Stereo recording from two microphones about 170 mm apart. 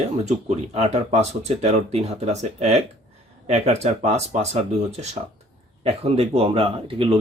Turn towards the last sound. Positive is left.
turn(degrees=-30)  # may be behind; listen again after turning